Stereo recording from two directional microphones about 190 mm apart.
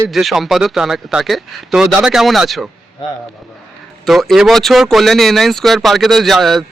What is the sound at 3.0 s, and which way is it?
Speech, 25° left (ahead or behind).